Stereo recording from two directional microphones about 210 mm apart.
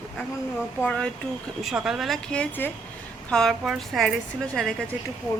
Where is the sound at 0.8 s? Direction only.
5° left (ahead or behind).